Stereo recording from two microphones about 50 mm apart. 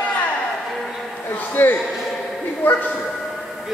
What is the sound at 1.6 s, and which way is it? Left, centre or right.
Speech, left.